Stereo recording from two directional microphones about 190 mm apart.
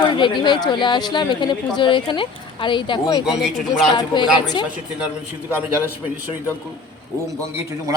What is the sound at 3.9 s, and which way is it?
Speech, 25° left (ahead or behind).